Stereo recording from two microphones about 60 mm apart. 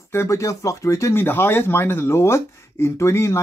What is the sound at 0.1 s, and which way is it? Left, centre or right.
Speech, left.